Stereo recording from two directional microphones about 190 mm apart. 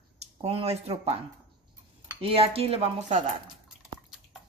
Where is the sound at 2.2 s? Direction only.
30° right (ahead or behind).